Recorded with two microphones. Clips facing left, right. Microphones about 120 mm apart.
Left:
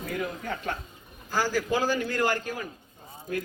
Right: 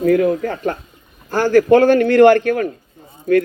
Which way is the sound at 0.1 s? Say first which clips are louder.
Right 16 dB; 75° right (ahead or behind).